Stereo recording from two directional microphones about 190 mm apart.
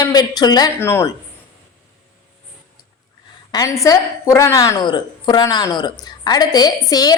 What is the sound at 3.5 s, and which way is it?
A woman's voice, 15° left (ahead or behind).